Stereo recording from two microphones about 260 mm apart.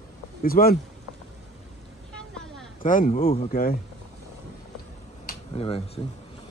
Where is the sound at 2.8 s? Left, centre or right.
Left.